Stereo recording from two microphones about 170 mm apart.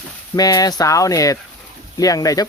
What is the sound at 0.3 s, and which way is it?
Speech, 20° left (ahead or behind).